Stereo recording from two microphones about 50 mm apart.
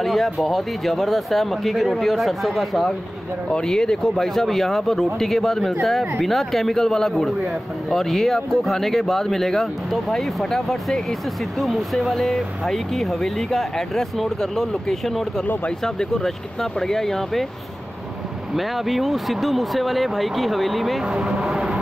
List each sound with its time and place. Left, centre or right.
0.0 s speech: centre
3.4 s a man's voice: centre
15.4 s speech: left
15.8 s a man's voice: centre
18.5 s speech: centre
21.0 s speech: centre